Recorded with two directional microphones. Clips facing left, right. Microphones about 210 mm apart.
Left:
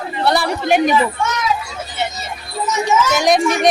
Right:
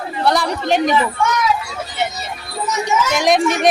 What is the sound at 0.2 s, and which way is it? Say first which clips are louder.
Speech: even; 5° left (ahead or behind).